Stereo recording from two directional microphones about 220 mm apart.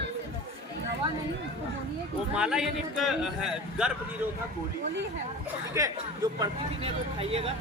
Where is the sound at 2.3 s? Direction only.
5° right (ahead or behind).